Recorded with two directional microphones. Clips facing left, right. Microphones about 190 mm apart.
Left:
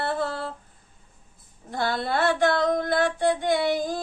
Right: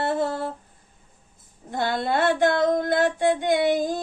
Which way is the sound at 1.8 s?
20° right (ahead or behind).